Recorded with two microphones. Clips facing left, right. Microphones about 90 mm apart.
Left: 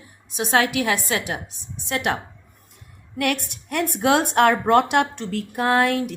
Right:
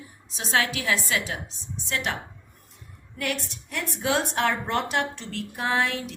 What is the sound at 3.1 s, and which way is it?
A woman's voice, 65° left (ahead or behind).